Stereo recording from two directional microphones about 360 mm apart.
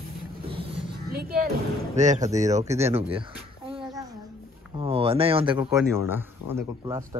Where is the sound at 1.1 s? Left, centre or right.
Right.